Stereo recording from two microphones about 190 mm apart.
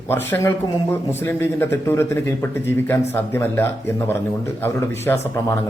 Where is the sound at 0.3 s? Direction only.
15° left (ahead or behind).